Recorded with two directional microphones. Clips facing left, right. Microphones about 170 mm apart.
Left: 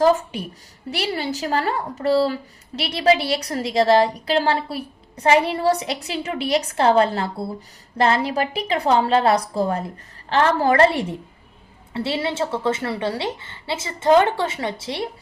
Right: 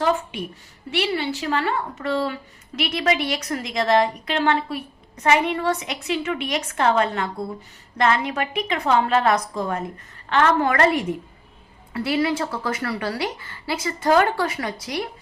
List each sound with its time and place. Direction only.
0.0 s a woman's voice: 40° left (ahead or behind)